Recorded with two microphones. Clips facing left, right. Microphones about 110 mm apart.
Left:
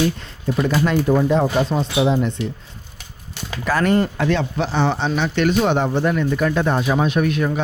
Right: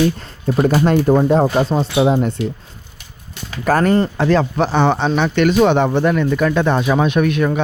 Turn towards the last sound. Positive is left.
turn(degrees=-75)  # may be behind; listen again after turning